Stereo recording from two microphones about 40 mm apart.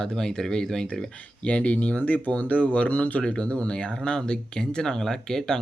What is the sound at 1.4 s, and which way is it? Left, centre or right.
Speech, left.